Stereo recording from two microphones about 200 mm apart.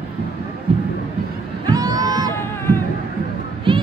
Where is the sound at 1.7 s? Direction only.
20° right (ahead or behind).